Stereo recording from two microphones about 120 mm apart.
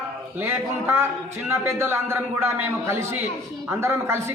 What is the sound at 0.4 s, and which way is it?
A man's voice, 20° right (ahead or behind).